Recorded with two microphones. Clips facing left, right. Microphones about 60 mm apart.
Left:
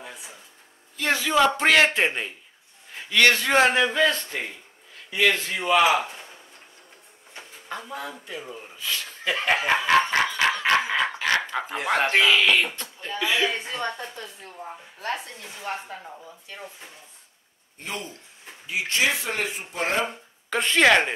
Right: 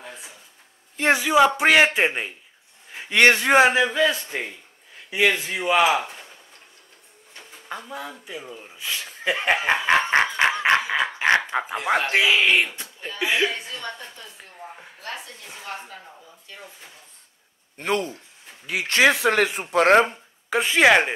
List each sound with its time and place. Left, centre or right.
1.1 s a man's voice: centre
3.1 s speech: right
3.6 s a man's voice: centre
7.6 s speech: centre
8.7 s speech: centre
11.2 s a sound: right
12.1 s a man's voice: centre
13.2 s speech: centre
13.5 s a woman's voice: left
15.6 s speech: left
17.7 s speech: right
20.4 s a man's voice: centre